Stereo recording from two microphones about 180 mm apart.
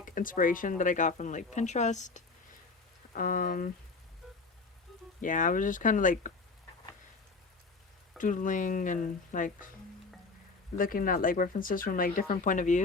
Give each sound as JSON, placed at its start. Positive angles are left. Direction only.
{"t": 0.0, "sound": "speech", "side_deg": 50}
{"t": 5.2, "sound": "speech", "side_deg": 45}
{"t": 8.2, "sound": "speech", "side_deg": 45}
{"t": 10.8, "sound": "speech", "side_deg": 50}